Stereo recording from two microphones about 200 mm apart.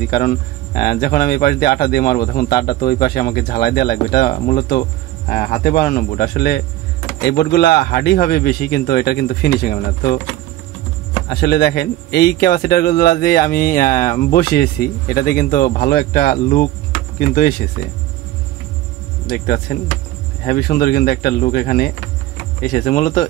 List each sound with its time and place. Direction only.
0.1 s speech: 45° left (ahead or behind)
11.2 s speech: 55° left (ahead or behind)
19.2 s speech: 50° left (ahead or behind)
22.7 s speech: 40° left (ahead or behind)